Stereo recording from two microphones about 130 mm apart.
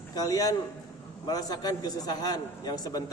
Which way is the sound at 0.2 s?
30° left (ahead or behind).